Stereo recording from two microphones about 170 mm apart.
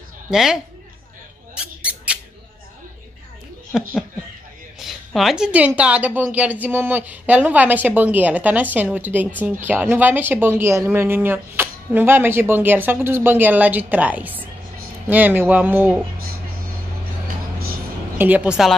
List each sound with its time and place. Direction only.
0.3 s a woman's voice: 5° right (ahead or behind)
1.5 s a sound: 5° right (ahead or behind)
3.7 s a woman's voice: centre (ahead or behind)
18.1 s speech: 10° right (ahead or behind)